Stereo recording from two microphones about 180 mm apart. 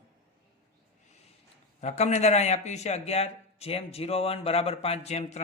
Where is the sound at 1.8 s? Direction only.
40° left (ahead or behind).